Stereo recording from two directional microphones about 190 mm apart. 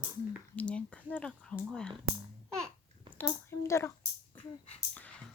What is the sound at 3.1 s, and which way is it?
Speech, 15° left (ahead or behind).